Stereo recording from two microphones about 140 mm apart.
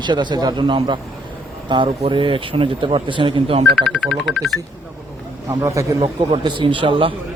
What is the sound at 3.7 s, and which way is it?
Speech, 5° left (ahead or behind).